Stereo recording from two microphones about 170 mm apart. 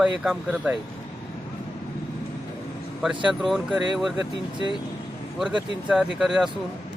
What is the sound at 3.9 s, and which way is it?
Speech, centre (ahead or behind).